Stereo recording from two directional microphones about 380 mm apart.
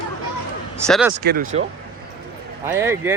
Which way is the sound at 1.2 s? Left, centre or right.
Right.